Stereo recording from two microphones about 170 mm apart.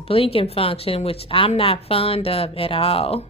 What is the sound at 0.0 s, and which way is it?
A woman's voice, 35° left (ahead or behind).